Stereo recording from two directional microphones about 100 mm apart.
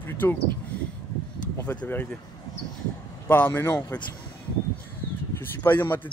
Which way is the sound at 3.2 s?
20° left (ahead or behind).